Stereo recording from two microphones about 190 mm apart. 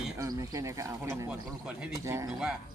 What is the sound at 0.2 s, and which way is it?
Speech, 15° right (ahead or behind).